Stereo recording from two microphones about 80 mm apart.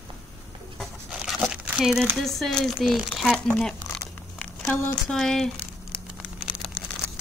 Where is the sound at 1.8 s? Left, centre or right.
Centre.